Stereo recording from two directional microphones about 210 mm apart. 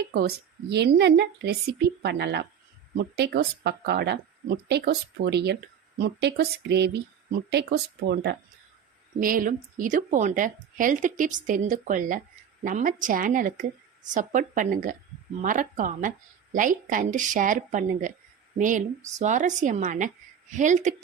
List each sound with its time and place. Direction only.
0.1 s a woman's voice: 50° right (ahead or behind)
19.2 s a woman's voice: 35° right (ahead or behind)